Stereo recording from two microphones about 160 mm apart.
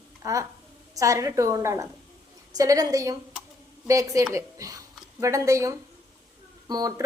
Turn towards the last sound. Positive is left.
turn(degrees=-20)  # may be behind; listen again after turning